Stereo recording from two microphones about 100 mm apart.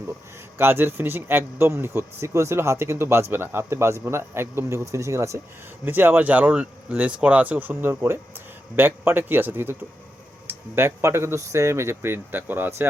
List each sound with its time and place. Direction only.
0.6 s speech: 20° right (ahead or behind)
5.8 s speech: 20° right (ahead or behind)